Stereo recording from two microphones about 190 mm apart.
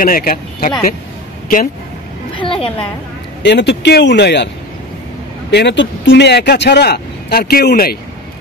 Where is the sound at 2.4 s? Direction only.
25° left (ahead or behind).